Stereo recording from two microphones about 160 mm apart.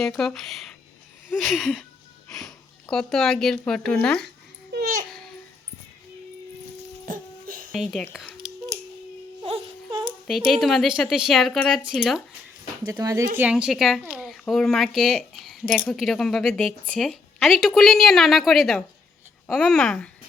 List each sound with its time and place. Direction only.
0.0 s speech: centre (ahead or behind)
7.0 s music: 55° right (ahead or behind)
7.7 s speech: centre (ahead or behind)
9.4 s a sound: 35° right (ahead or behind)
10.2 s speech: centre (ahead or behind)
12.9 s speech: 20° right (ahead or behind)
13.3 s speech: 10° right (ahead or behind)